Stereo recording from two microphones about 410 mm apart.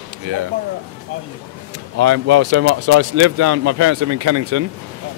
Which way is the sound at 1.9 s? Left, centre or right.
Right.